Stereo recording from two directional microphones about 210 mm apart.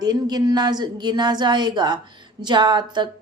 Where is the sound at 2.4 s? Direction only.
20° right (ahead or behind).